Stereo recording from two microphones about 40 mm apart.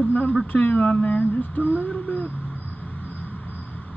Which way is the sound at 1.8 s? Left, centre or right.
Left.